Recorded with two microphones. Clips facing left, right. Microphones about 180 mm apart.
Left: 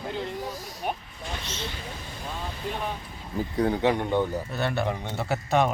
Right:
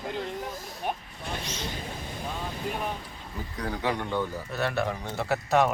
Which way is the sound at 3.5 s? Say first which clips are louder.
Left 7 dB; 25° left (ahead or behind).